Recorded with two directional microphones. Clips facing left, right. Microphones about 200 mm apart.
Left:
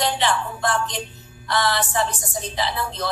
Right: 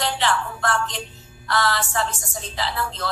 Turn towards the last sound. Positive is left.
turn(degrees=15)  # may be behind; listen again after turning